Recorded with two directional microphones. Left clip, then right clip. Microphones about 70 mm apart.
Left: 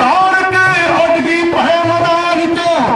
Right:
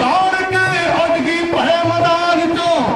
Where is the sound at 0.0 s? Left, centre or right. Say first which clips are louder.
Left 4 dB; left.